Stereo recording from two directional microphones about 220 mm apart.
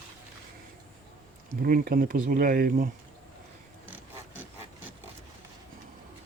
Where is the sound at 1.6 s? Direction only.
40° right (ahead or behind).